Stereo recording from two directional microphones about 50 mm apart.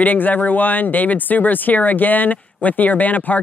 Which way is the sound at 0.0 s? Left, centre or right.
Left.